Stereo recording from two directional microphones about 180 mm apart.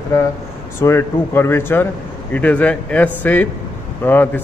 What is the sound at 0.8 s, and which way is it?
A man's voice, 15° left (ahead or behind).